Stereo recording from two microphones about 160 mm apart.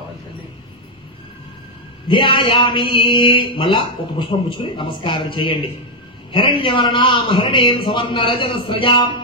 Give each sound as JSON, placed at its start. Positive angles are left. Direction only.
{"t": 2.0, "sound": "a man's voice", "side_deg": 30}